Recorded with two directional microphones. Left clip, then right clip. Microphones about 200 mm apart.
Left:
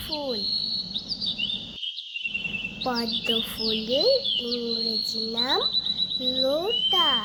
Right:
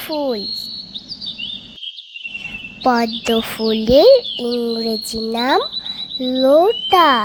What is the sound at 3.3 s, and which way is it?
Speech, 35° right (ahead or behind).